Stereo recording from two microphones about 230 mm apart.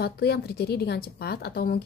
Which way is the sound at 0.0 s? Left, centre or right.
Left.